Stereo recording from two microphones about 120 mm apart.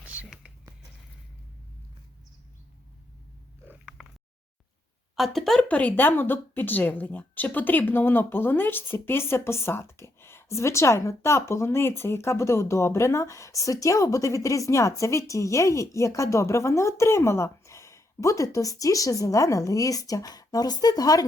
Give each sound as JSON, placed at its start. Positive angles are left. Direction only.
{"t": 0.0, "sound": "whispering", "side_deg": -10}
{"t": 3.7, "sound": "oink", "side_deg": -5}
{"t": 5.1, "sound": "speech", "side_deg": 0}